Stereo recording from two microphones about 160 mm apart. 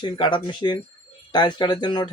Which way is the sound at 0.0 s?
30° left (ahead or behind).